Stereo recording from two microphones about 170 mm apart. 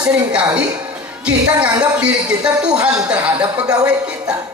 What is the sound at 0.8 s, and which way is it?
Speech, 10° right (ahead or behind).